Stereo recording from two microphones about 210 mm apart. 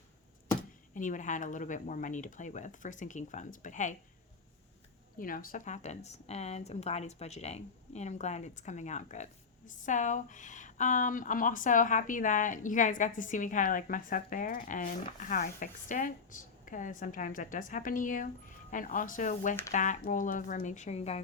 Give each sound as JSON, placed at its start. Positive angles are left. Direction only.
{"t": 0.9, "sound": "speech", "side_deg": 35}
{"t": 5.1, "sound": "speech", "side_deg": 40}